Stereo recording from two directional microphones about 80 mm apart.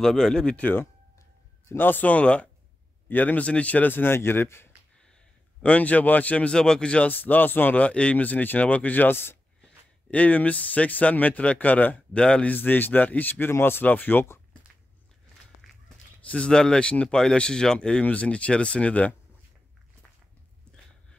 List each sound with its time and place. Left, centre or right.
0.0 s speech: centre
1.7 s speech: left
5.6 s speech: centre
15.6 s a sound: centre
16.3 s speech: centre